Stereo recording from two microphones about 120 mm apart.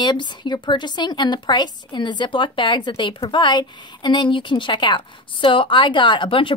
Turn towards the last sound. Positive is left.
turn(degrees=45)  # may be behind; listen again after turning